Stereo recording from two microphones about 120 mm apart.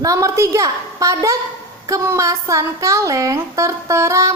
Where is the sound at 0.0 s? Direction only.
25° right (ahead or behind).